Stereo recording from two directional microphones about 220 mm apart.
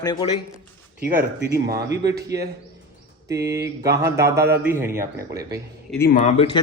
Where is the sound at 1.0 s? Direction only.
40° right (ahead or behind).